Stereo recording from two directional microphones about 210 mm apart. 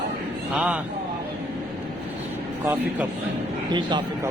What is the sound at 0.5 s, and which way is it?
Speech, 5° right (ahead or behind).